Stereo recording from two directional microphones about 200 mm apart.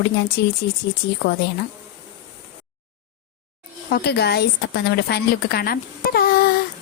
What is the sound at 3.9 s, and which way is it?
A woman's voice, 50° left (ahead or behind).